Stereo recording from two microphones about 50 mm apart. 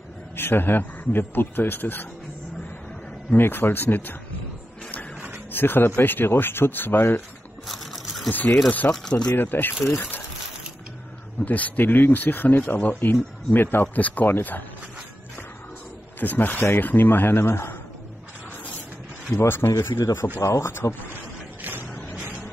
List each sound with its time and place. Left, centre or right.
0.4 s a man's voice: left
3.3 s a man's voice: left
5.5 s a man's voice: left
7.6 s a sound: centre
8.3 s speech: left
9.0 s speech: centre
9.3 s speech: left
11.4 s speech: left
16.2 s a man's voice: left
19.4 s a man's voice: left
21.5 s a sound: right